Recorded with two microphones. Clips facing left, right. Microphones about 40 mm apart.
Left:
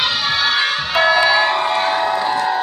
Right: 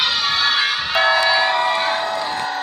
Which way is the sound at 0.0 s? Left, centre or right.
Centre.